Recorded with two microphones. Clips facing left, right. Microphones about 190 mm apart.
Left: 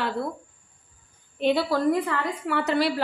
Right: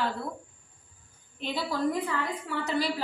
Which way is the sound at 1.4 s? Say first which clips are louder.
Left 7 dB; 65° left (ahead or behind).